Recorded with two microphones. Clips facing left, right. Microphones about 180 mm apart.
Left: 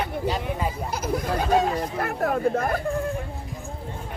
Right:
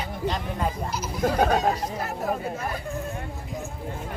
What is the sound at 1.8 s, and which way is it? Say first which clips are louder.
Speech: left 4 dB; 60° left (ahead or behind).